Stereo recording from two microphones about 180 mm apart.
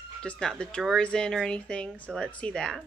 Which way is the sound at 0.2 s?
5° left (ahead or behind).